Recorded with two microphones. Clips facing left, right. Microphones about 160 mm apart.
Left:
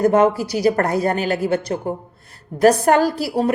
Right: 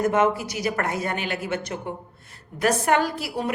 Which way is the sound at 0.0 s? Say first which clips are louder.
Left 6 dB; 35° left (ahead or behind).